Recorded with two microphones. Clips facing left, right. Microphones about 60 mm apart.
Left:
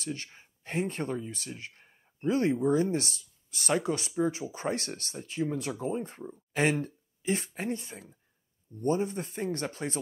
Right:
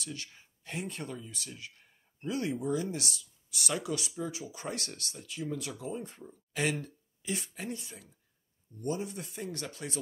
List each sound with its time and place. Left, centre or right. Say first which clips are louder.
0.0 s speech: left 5 dB; left